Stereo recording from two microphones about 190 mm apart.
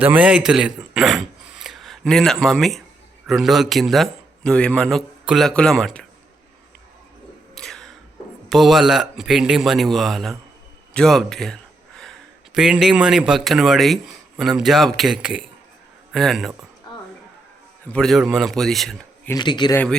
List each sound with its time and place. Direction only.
0.0 s speech: 10° right (ahead or behind)
7.5 s a sound: 5° left (ahead or behind)
8.4 s speech: centre (ahead or behind)
10.9 s a sound: centre (ahead or behind)
12.5 s speech: 5° right (ahead or behind)
17.9 s speech: centre (ahead or behind)
19.3 s speech: 25° left (ahead or behind)